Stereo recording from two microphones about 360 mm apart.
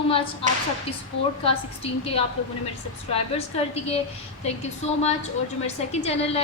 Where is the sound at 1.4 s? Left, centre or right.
Centre.